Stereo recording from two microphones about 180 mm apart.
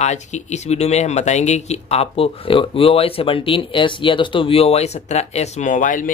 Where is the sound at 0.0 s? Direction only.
40° left (ahead or behind).